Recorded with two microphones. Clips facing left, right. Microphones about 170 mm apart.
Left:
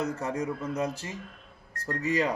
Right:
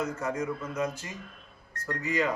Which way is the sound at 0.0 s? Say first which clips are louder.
Left 1 dB; 35° left (ahead or behind).